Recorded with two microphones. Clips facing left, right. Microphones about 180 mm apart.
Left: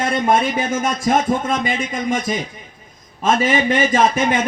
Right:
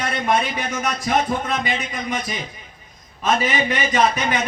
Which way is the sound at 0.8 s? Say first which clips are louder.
Left 2 dB; 45° left (ahead or behind).